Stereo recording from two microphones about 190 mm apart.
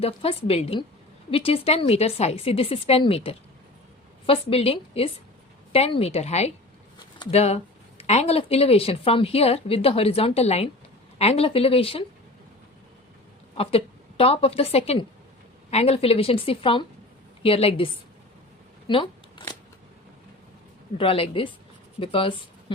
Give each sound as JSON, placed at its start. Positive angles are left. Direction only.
{"t": 0.0, "sound": "speech", "side_deg": 30}
{"t": 13.6, "sound": "a woman's voice", "side_deg": 30}
{"t": 18.9, "sound": "shuffling cards", "side_deg": 25}
{"t": 21.0, "sound": "a woman's voice", "side_deg": 30}